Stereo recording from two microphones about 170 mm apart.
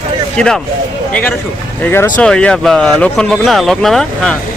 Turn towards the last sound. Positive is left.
turn(degrees=0)  # may be behind; listen again after turning